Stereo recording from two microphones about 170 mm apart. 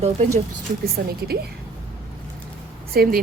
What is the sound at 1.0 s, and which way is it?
Speech, 70° right (ahead or behind).